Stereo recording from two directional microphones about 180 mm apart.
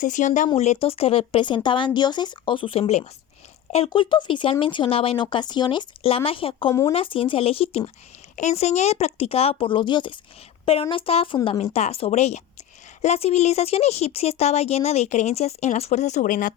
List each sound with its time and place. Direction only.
0.0 s speech: 45° left (ahead or behind)